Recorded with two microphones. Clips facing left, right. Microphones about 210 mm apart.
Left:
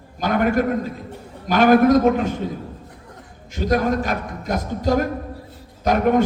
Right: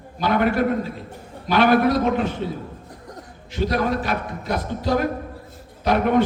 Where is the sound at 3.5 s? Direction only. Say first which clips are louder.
Left 2 dB; 45° left (ahead or behind).